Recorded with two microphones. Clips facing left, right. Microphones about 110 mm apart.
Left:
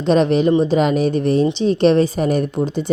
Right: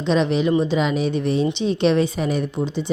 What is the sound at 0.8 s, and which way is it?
A woman's voice, 50° left (ahead or behind).